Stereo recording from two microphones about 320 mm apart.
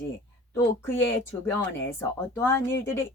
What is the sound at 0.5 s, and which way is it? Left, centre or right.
Speech, centre.